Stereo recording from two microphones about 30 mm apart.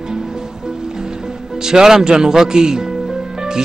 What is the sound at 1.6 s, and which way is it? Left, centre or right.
Speech, right.